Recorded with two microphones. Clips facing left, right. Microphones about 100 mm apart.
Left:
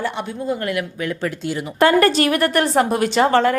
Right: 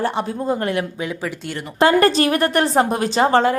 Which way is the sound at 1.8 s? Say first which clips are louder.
Even; 30° right (ahead or behind).